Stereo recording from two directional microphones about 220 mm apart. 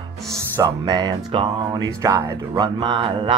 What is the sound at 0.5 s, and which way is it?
Speech, 20° right (ahead or behind).